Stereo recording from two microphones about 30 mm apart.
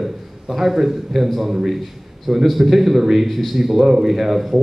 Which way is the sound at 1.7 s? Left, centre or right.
Centre.